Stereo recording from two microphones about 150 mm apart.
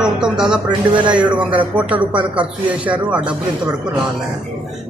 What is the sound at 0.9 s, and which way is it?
Speech, 35° right (ahead or behind).